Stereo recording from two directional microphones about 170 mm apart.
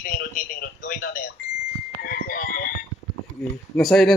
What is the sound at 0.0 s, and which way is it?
A man's voice, 50° left (ahead or behind).